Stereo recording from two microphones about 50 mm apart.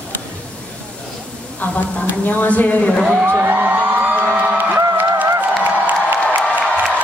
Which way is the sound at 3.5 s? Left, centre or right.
Right.